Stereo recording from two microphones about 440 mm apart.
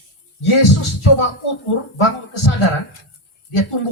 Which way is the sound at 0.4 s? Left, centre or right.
Left.